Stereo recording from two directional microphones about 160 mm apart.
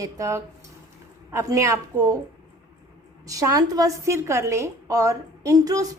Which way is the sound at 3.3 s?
20° right (ahead or behind).